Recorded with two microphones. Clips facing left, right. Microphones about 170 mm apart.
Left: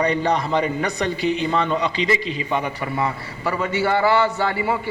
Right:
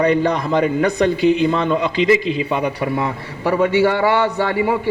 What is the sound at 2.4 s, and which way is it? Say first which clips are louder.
A man's voice: right 4 dB; 65° right (ahead or behind).